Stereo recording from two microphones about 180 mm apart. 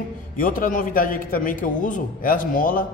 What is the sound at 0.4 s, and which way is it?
A man's voice, 50° left (ahead or behind).